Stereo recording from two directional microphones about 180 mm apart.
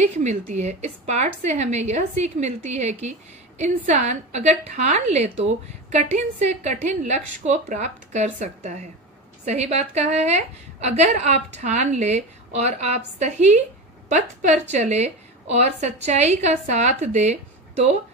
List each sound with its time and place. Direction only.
0.0 s a woman's voice: 40° right (ahead or behind)